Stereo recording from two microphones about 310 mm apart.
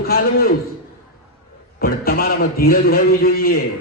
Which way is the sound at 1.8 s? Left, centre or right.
Left.